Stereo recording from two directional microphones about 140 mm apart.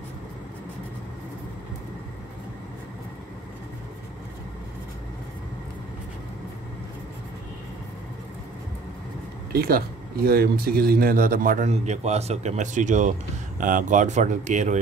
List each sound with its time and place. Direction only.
9.5 s speech: 90° right
11.7 s speech: 50° right (ahead or behind)